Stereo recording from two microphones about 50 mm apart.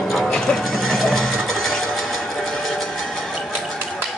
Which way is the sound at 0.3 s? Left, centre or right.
Centre.